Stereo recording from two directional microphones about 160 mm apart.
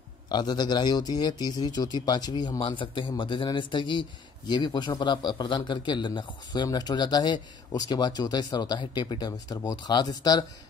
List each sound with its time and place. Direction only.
0.3 s speech: 25° left (ahead or behind)